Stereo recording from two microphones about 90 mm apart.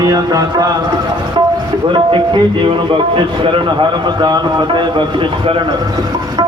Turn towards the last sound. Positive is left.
turn(degrees=-65)  # may be behind; listen again after turning